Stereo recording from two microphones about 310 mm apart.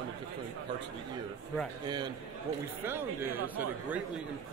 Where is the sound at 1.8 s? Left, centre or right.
Centre.